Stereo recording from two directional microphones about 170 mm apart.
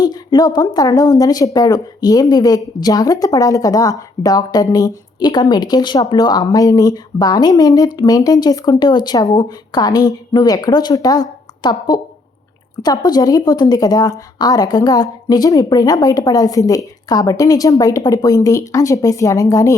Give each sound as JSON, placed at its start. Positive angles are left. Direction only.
{"t": 0.0, "sound": "a woman's voice", "side_deg": 25}